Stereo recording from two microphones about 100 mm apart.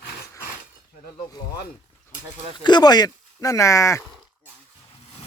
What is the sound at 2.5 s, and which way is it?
Speech, 45° left (ahead or behind).